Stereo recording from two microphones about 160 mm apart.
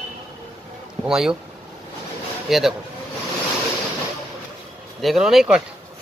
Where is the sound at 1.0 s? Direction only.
5° right (ahead or behind).